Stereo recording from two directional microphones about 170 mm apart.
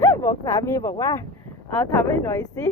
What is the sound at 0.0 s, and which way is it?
Speech, 15° left (ahead or behind).